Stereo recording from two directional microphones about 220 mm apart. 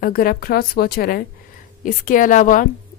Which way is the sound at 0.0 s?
40° left (ahead or behind).